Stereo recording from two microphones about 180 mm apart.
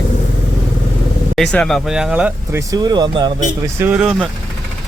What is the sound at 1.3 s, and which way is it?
Speech, 5° left (ahead or behind).